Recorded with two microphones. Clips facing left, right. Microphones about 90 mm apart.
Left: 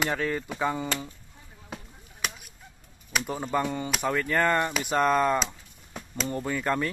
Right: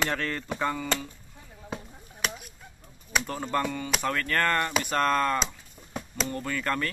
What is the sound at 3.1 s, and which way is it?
Speech, 5° left (ahead or behind).